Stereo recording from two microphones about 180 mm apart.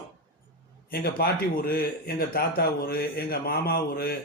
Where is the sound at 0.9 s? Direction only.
60° left (ahead or behind).